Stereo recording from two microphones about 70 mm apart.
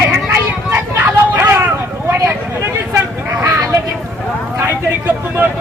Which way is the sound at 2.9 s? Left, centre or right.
Right.